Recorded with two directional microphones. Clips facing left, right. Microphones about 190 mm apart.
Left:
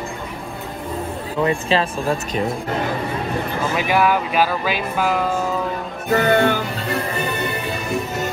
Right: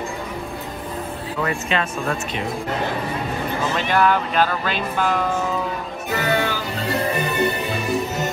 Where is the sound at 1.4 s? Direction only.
30° left (ahead or behind).